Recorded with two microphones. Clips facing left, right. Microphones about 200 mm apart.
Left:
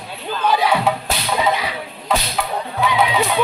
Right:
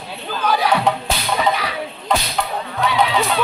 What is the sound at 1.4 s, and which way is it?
Whip, 20° left (ahead or behind).